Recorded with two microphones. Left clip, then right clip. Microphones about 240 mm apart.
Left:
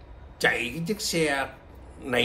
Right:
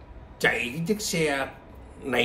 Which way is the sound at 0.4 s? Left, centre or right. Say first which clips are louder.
Even; centre.